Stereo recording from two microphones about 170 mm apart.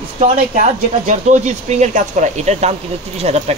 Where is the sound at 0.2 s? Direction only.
45° right (ahead or behind).